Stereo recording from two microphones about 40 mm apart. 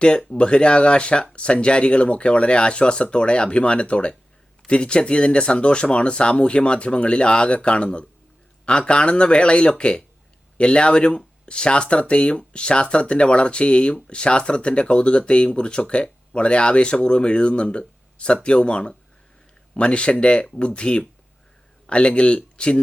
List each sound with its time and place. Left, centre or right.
0.3 s speech: left